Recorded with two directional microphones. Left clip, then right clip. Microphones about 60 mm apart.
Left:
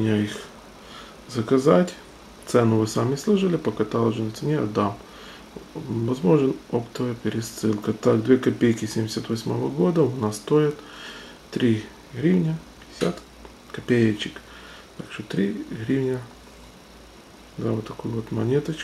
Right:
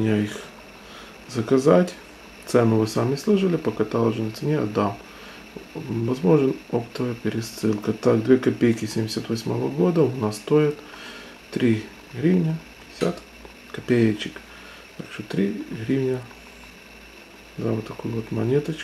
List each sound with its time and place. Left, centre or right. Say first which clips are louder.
0.0 s speech: right 1 dB; centre
6.0 s speech: right 1 dB; centre
13.7 s speech: right 1 dB; centre
17.6 s speech: right 1 dB; centre